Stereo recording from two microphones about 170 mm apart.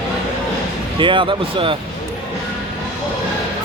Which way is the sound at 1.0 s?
30° right (ahead or behind).